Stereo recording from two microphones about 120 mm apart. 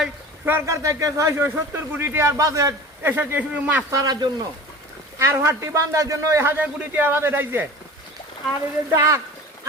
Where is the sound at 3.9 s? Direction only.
35° right (ahead or behind).